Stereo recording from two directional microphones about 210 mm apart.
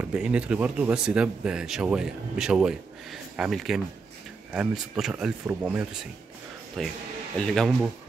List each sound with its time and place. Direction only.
0.0 s speech: 5° right (ahead or behind)